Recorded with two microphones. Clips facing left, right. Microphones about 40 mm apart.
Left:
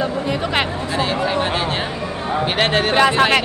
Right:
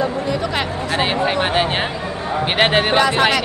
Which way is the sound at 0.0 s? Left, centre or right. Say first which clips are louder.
Right 1 dB; left.